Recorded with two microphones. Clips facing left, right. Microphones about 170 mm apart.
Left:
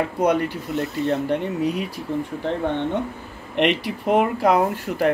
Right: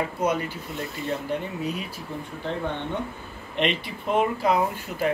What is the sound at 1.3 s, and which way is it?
Speech, 65° left (ahead or behind).